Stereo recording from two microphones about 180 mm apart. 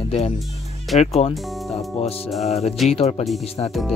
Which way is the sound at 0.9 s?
35° left (ahead or behind).